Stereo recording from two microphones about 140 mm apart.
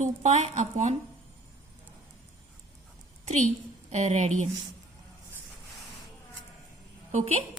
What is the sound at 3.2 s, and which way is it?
Speech, 55° right (ahead or behind).